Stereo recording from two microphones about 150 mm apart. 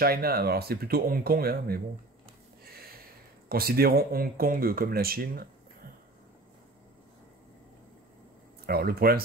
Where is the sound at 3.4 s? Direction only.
90° right.